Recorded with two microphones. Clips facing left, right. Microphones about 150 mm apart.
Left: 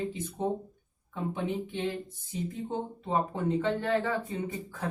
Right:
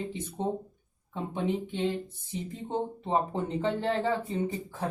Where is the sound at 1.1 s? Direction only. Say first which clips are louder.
Left 1 dB; 25° right (ahead or behind).